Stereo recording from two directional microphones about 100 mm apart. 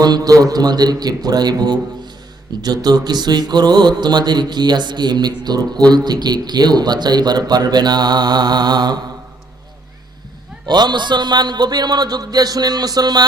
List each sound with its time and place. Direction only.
0.0 s speech: 40° right (ahead or behind)
10.7 s speech: 50° right (ahead or behind)